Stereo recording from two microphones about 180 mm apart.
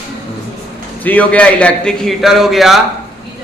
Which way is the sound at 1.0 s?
10° left (ahead or behind).